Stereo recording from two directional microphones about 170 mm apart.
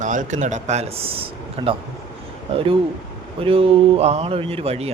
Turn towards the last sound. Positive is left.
turn(degrees=-35)  # may be behind; listen again after turning